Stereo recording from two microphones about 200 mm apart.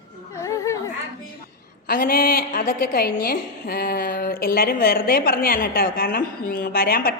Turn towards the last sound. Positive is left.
turn(degrees=50)  # may be behind; listen again after turning